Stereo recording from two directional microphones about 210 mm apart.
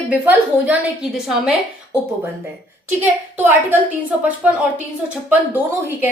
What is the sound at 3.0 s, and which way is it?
Speech, 10° right (ahead or behind).